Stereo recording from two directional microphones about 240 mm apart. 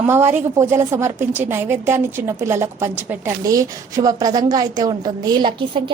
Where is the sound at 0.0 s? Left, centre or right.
Centre.